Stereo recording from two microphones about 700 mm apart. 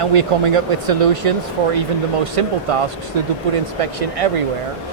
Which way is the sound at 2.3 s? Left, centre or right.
Right.